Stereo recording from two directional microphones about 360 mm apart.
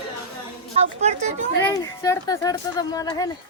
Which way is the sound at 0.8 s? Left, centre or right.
Centre.